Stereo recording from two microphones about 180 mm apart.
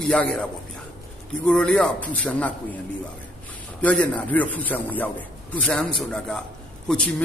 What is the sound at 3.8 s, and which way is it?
A man's voice, 5° left (ahead or behind).